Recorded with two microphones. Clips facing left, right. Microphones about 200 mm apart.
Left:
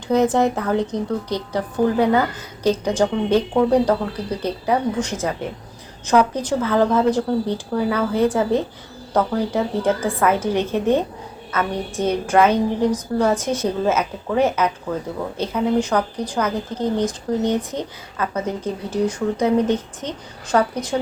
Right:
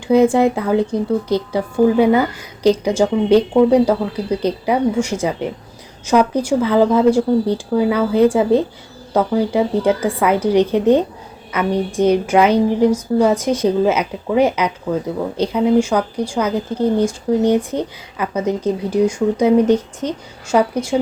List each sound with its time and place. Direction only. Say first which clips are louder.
0.1 s speech: right 5 dB; 10° right (ahead or behind)
12.3 s speech: right 3 dB; 10° right (ahead or behind)